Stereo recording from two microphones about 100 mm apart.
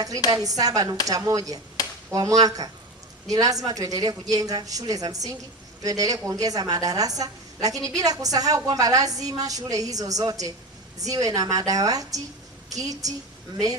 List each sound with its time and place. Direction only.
0.4 s a woman's voice: 35° right (ahead or behind)